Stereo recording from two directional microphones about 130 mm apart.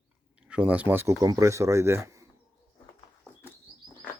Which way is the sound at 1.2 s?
25° right (ahead or behind).